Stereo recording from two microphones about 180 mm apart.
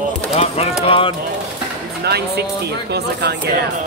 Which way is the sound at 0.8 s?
30° left (ahead or behind).